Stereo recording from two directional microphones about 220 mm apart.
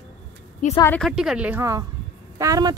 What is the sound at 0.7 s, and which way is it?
A woman's voice, 10° left (ahead or behind).